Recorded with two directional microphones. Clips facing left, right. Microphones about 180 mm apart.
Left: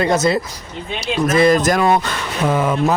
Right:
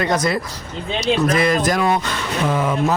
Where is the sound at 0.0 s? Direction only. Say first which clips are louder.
Left 3 dB; 25° left (ahead or behind).